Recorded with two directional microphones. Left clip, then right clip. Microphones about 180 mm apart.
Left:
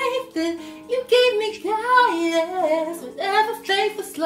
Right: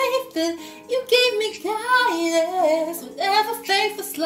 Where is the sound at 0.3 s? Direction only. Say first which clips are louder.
Right 1 dB; 15° left (ahead or behind).